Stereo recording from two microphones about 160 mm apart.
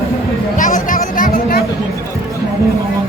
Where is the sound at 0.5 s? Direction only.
55° left (ahead or behind).